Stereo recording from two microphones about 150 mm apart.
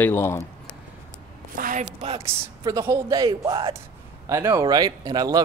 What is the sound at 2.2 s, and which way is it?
Speech, 20° right (ahead or behind).